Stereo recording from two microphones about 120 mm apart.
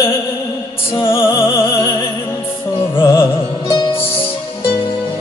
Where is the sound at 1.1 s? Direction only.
20° left (ahead or behind).